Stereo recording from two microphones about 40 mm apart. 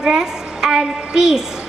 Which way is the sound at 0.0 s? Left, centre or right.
Centre.